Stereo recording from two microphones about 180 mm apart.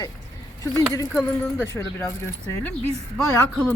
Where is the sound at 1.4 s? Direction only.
15° left (ahead or behind).